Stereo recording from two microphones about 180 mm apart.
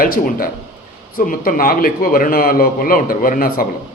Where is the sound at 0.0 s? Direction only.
55° left (ahead or behind).